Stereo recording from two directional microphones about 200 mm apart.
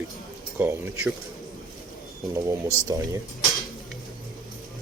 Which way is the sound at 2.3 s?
20° right (ahead or behind).